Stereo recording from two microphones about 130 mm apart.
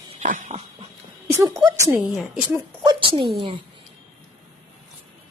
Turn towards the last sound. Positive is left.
turn(degrees=-40)  # may be behind; listen again after turning